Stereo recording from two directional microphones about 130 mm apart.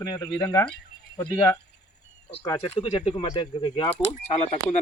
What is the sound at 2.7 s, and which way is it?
Speech, 50° left (ahead or behind).